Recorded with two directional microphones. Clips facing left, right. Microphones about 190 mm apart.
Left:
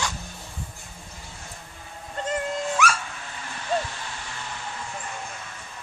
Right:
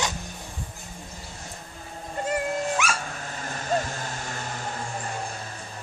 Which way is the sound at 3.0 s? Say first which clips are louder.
Right 4 dB; 40° right (ahead or behind).